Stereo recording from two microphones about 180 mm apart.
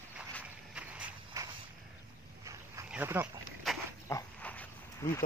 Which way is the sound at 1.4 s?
15° right (ahead or behind).